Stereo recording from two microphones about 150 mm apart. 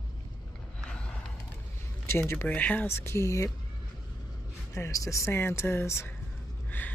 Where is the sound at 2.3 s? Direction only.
15° left (ahead or behind).